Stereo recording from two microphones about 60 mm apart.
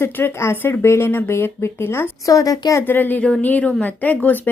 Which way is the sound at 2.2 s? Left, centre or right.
Left.